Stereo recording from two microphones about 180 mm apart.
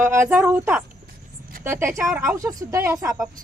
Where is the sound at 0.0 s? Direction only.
15° right (ahead or behind).